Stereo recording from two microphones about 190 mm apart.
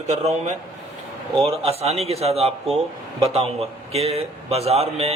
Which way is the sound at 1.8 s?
35° right (ahead or behind).